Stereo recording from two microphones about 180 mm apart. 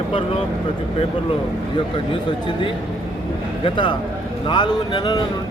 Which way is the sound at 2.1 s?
25° left (ahead or behind).